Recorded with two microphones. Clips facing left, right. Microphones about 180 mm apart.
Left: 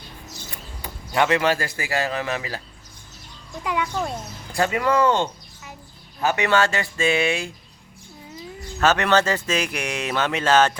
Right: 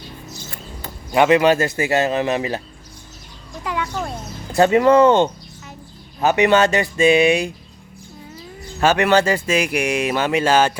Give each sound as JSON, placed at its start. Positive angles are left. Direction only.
{"t": 1.1, "sound": "a man's voice", "side_deg": -15}
{"t": 3.6, "sound": "music", "side_deg": 15}
{"t": 4.5, "sound": "a man's voice", "side_deg": -25}
{"t": 8.8, "sound": "speech", "side_deg": -10}